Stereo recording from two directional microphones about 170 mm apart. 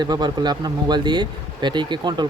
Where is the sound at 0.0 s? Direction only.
25° right (ahead or behind).